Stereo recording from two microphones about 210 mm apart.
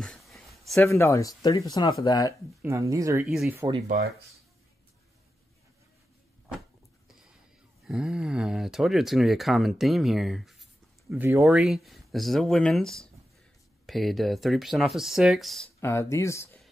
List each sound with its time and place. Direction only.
0.0 s a sound: centre (ahead or behind)
0.8 s speech: 15° left (ahead or behind)
2.6 s speech: 15° right (ahead or behind)
3.3 s speech: centre (ahead or behind)
7.1 s a sound: centre (ahead or behind)
7.8 s speech: centre (ahead or behind)
15.8 s speech: 15° left (ahead or behind)